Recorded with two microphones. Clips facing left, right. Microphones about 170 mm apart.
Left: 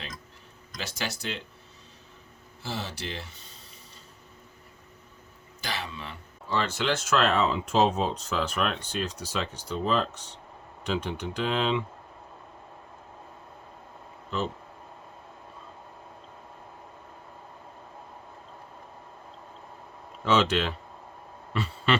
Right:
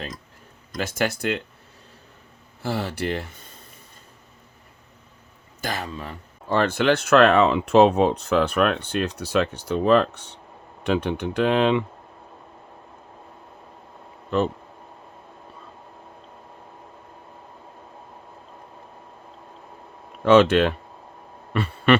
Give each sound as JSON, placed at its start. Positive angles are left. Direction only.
{"t": 0.7, "sound": "speech", "side_deg": -50}
{"t": 2.6, "sound": "speech", "side_deg": -55}
{"t": 5.6, "sound": "speech", "side_deg": -45}
{"t": 14.3, "sound": "speech", "side_deg": -60}
{"t": 20.2, "sound": "speech", "side_deg": -55}
{"t": 21.5, "sound": "a sound", "side_deg": -55}